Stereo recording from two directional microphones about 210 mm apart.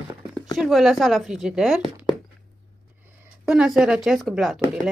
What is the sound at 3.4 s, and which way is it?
Speech, centre (ahead or behind).